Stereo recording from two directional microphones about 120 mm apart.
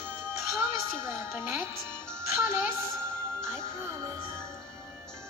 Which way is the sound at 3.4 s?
20° right (ahead or behind).